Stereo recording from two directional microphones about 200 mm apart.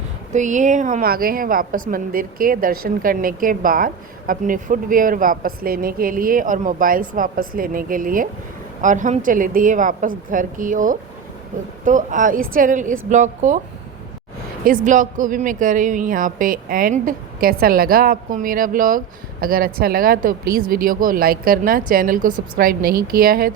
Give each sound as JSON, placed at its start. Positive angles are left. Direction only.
{"t": 0.3, "sound": "a woman's voice", "side_deg": -35}
{"t": 14.8, "sound": "a woman's voice", "side_deg": -40}